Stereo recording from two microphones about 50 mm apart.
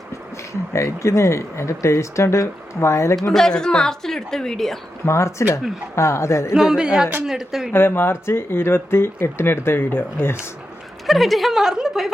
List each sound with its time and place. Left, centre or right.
0.7 s a man's voice: left
3.3 s a woman's voice: centre
5.0 s a man's voice: left
6.5 s speech: centre
7.7 s speech: left
11.0 s a woman's voice: centre